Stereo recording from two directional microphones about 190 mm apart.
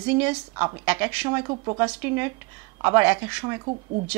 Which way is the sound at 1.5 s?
25° right (ahead or behind).